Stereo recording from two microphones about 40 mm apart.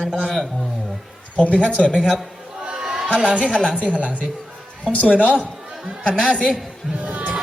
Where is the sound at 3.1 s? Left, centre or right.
Right.